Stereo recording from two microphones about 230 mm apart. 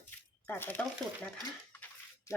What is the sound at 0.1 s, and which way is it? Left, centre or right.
Speech, centre.